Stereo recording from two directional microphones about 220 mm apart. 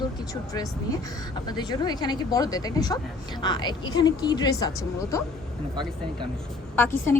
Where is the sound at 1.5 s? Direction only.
20° left (ahead or behind).